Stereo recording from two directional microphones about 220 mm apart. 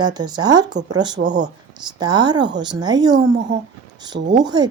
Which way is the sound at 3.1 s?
55° right (ahead or behind).